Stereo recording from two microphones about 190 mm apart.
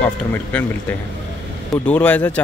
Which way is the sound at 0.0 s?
10° left (ahead or behind).